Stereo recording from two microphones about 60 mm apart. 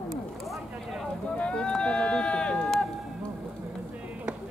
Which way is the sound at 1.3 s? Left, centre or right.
Centre.